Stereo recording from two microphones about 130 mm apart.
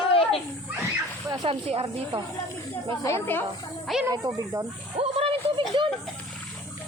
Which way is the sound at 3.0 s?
20° left (ahead or behind).